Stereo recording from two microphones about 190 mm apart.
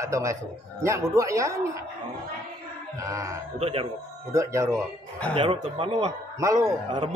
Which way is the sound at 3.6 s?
30° right (ahead or behind).